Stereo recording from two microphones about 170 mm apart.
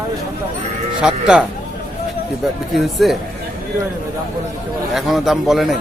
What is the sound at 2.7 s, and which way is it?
Speech, centre (ahead or behind).